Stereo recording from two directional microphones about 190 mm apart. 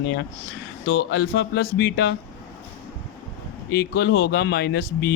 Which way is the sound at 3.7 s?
60° left (ahead or behind).